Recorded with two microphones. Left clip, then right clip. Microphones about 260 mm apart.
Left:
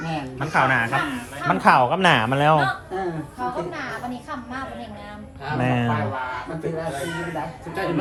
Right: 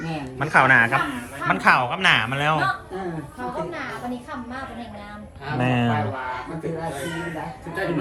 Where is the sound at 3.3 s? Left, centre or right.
Centre.